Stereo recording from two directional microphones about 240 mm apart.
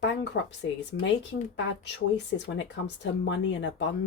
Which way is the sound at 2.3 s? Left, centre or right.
Left.